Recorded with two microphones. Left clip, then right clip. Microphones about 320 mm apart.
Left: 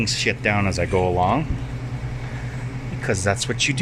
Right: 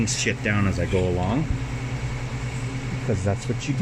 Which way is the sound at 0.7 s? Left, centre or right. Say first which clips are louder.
Left 4 dB; left.